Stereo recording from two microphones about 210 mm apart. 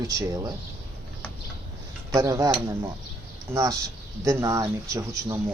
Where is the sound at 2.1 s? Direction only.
15° right (ahead or behind).